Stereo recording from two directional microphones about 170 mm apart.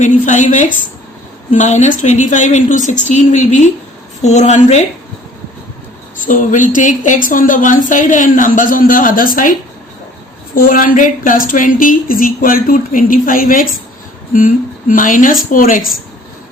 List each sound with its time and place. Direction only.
0.0 s speech: 45° left (ahead or behind)
6.1 s a woman's voice: 50° left (ahead or behind)